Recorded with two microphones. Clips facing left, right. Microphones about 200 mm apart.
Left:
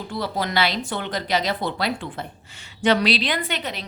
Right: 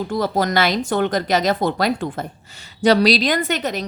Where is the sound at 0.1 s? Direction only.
45° right (ahead or behind).